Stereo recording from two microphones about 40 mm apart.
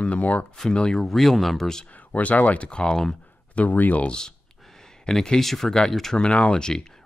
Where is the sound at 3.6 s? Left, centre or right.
Left.